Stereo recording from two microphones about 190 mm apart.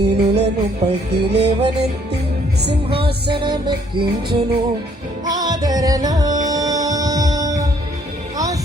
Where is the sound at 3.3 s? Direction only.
25° right (ahead or behind).